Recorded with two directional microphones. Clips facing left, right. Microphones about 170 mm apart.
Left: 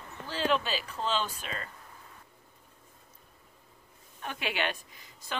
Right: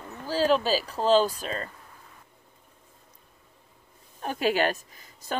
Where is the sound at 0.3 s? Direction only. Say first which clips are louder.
Right 7 dB; 40° right (ahead or behind).